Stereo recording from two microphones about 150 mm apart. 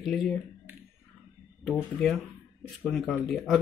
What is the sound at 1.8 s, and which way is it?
Speech, 10° left (ahead or behind).